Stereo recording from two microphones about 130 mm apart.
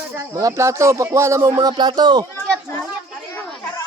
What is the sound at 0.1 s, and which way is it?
Speech, 25° right (ahead or behind).